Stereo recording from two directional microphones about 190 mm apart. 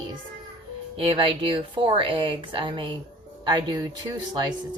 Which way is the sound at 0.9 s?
25° right (ahead or behind).